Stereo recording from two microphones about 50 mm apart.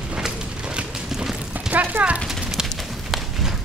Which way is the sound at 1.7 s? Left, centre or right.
Right.